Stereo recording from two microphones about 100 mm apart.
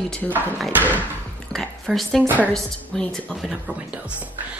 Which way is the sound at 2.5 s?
5° left (ahead or behind).